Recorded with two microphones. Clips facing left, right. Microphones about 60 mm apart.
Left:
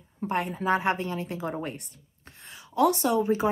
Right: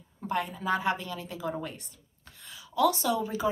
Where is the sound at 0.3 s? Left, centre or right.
Left.